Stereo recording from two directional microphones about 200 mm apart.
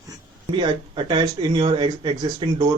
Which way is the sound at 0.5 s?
25° right (ahead or behind).